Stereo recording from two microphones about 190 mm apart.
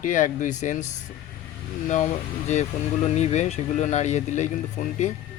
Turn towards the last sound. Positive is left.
turn(degrees=40)  # may be behind; listen again after turning